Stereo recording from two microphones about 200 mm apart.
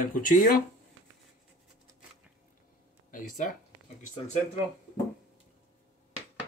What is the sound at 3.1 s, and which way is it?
Speech, 40° left (ahead or behind).